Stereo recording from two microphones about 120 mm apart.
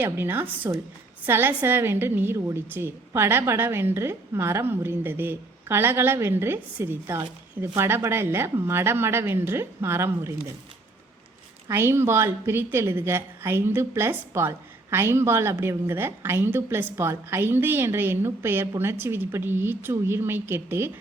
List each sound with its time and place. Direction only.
0.0 s a woman's voice: 15° right (ahead or behind)
11.7 s a woman's voice: 20° right (ahead or behind)